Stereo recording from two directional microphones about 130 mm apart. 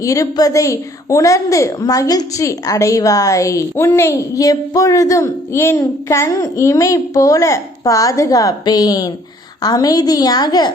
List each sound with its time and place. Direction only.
0.0 s a woman's voice: 25° left (ahead or behind)